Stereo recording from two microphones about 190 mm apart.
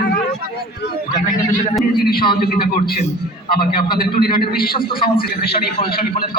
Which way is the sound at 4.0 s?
50° left (ahead or behind).